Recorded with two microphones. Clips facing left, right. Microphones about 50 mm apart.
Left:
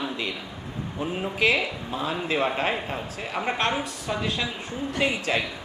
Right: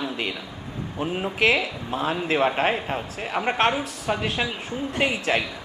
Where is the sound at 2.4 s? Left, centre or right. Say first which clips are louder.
Right 4 dB; centre.